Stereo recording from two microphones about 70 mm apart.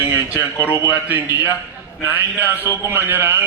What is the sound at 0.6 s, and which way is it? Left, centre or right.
Speech, left.